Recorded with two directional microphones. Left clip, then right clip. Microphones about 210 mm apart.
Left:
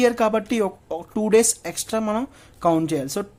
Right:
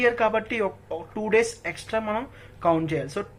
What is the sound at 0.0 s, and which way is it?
Speech, 45° left (ahead or behind).